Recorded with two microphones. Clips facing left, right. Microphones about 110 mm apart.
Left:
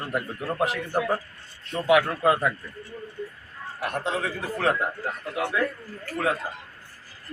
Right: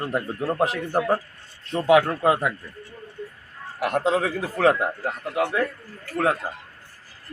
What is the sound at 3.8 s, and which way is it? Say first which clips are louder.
Speech: right 6 dB; 90° right.